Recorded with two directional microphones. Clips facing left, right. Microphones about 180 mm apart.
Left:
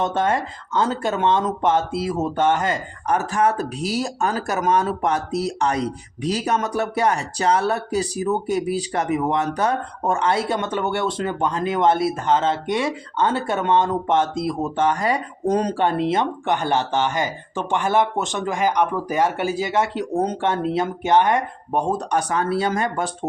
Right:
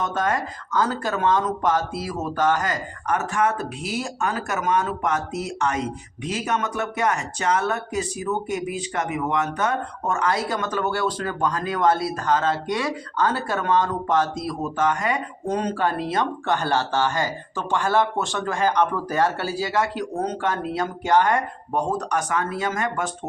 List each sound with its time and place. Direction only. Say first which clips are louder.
0.0 s speech: left 3 dB; 25° left (ahead or behind)
15.8 s speech: left 3 dB; 25° left (ahead or behind)